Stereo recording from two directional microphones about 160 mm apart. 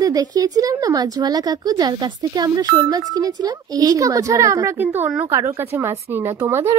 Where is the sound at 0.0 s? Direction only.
20° right (ahead or behind).